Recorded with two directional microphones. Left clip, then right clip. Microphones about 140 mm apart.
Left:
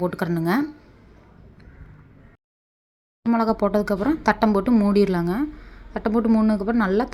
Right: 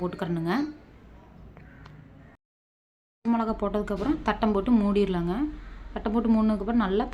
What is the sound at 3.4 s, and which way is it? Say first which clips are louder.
A woman's voice: left 9 dB; 45° left (ahead or behind).